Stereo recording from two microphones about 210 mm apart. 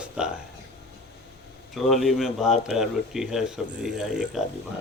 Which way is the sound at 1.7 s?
Centre (ahead or behind).